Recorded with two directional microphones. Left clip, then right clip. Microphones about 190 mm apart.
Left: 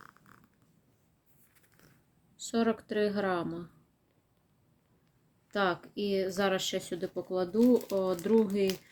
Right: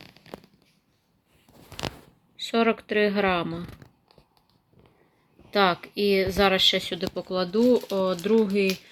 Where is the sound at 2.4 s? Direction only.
5° right (ahead or behind).